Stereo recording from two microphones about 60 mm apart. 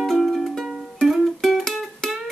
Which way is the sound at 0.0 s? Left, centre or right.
Centre.